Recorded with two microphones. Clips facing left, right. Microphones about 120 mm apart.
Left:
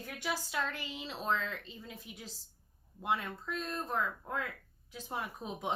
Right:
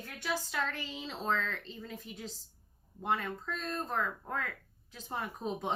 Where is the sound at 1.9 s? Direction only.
45° right (ahead or behind).